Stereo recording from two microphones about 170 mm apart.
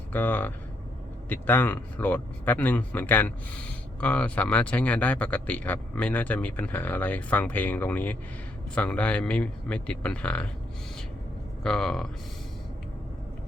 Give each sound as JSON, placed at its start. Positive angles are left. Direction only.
{"t": 0.1, "sound": "speech", "side_deg": 10}
{"t": 11.6, "sound": "speech", "side_deg": 5}